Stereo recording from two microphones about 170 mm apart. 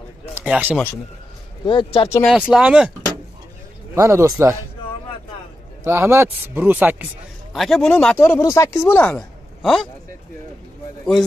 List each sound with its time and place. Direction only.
0.3 s a sound: 10° right (ahead or behind)
1.7 s speech: 30° left (ahead or behind)
2.2 s speech: centre (ahead or behind)
3.9 s speech: 15° right (ahead or behind)
5.9 s speech: 15° right (ahead or behind)
7.5 s a man's voice: centre (ahead or behind)